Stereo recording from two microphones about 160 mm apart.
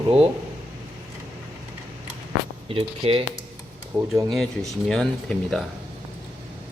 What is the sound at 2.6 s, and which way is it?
Speech, 35° right (ahead or behind).